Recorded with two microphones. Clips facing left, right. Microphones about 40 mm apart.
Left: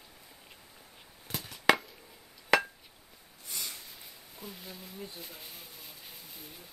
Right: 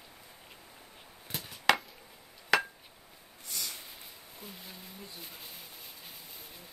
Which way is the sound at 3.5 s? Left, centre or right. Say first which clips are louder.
Right 1 dB; centre.